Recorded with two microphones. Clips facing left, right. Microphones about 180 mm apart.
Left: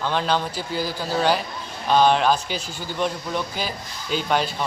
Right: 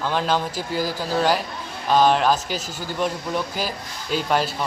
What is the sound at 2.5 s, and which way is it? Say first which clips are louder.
Speech: right 1 dB; 40° right (ahead or behind).